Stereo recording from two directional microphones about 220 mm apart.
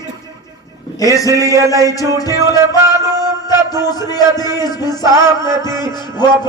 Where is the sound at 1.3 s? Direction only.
15° right (ahead or behind).